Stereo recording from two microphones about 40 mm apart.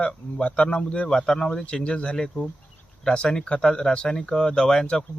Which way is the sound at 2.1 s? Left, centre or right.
Centre.